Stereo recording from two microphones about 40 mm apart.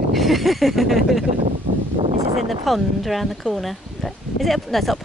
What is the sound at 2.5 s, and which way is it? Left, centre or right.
Speech, centre.